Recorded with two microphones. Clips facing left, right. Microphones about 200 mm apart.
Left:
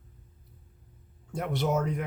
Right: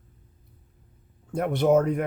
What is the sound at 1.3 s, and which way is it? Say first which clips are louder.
Speech: right 8 dB; 55° right (ahead or behind).